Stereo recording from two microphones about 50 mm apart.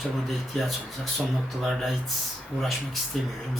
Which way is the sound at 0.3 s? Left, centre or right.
Centre.